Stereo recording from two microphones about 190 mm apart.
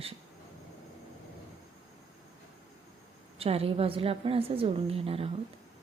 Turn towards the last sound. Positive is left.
turn(degrees=-30)  # may be behind; listen again after turning